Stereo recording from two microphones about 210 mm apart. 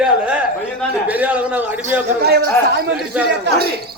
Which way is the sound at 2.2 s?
50° right (ahead or behind).